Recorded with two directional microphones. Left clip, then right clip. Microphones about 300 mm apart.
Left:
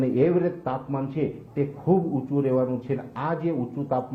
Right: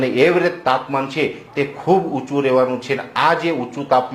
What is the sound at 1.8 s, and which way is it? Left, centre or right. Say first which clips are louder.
Speech: right 7 dB; right.